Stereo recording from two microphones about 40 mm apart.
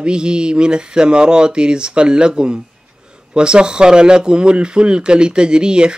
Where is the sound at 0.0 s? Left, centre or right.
Right.